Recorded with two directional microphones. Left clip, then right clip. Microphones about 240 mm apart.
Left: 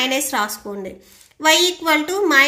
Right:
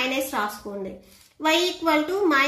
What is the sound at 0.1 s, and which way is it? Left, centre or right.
A woman's voice, left.